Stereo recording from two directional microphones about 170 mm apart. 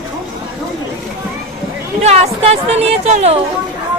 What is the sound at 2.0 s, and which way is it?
Speech, 40° right (ahead or behind).